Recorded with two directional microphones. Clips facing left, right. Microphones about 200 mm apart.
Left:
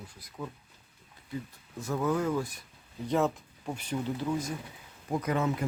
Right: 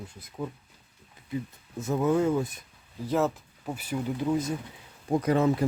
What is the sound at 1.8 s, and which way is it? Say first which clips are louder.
Speech: right 5 dB; 25° right (ahead or behind).